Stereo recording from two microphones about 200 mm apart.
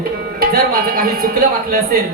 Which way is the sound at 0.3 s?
45° right (ahead or behind).